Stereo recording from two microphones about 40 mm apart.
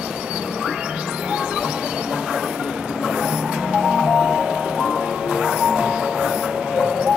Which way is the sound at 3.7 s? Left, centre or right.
Centre.